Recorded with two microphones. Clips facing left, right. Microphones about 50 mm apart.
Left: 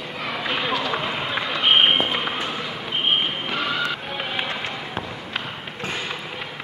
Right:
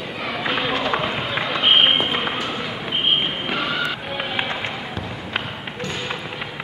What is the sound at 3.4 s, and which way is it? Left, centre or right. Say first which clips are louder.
Music: right 1 dB; centre.